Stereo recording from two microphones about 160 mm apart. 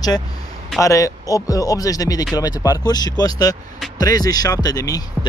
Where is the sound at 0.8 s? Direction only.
20° left (ahead or behind).